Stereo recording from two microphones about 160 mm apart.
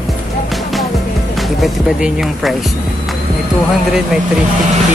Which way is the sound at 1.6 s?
Centre (ahead or behind).